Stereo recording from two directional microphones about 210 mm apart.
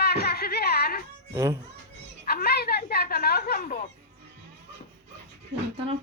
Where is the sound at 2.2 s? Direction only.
45° left (ahead or behind).